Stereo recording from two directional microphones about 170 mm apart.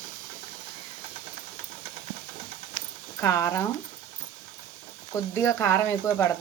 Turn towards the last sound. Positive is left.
turn(degrees=15)  # may be behind; listen again after turning